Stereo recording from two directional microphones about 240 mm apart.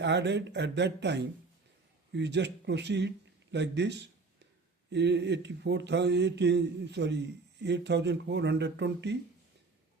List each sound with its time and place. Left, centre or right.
0.0 s speech: right